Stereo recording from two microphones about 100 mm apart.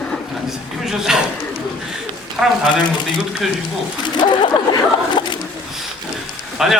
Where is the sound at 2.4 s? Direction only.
5° right (ahead or behind).